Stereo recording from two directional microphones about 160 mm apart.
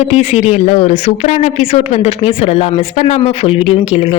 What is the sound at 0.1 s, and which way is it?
Speech, 40° left (ahead or behind).